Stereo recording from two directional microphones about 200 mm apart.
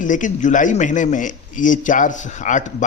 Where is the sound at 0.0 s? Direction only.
40° left (ahead or behind).